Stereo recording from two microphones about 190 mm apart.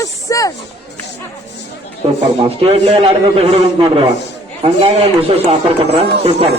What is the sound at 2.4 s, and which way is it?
Speech, 30° right (ahead or behind).